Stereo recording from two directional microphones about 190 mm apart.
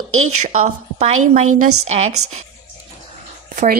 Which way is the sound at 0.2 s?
35° right (ahead or behind).